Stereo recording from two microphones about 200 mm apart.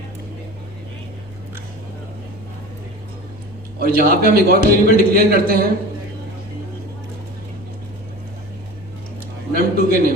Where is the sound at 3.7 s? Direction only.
50° right (ahead or behind).